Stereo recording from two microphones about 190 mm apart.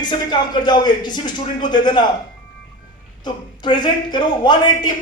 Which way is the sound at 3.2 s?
25° left (ahead or behind).